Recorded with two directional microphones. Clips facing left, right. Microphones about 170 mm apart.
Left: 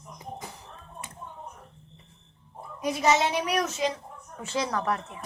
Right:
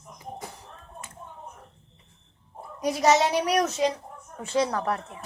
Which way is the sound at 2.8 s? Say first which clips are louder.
Right 3 dB; 40° right (ahead or behind).